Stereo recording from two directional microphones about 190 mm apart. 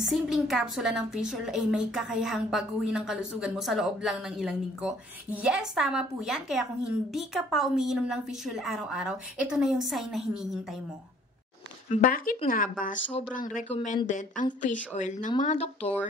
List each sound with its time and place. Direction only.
0.0 s a woman's voice: centre (ahead or behind)
11.9 s speech: 45° left (ahead or behind)